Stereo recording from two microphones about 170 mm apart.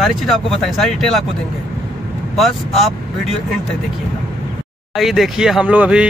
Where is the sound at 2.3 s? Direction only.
Centre (ahead or behind).